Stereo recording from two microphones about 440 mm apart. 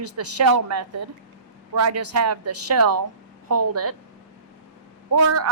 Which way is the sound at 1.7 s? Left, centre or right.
Right.